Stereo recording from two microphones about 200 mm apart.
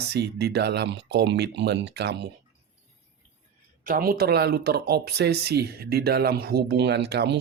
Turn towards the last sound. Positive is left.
turn(degrees=-55)  # may be behind; listen again after turning